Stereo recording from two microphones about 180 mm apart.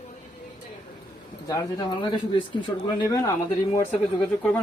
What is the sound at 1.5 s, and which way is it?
Speech, 20° left (ahead or behind).